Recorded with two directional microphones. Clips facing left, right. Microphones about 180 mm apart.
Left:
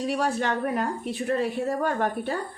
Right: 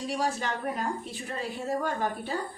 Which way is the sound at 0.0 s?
65° left (ahead or behind).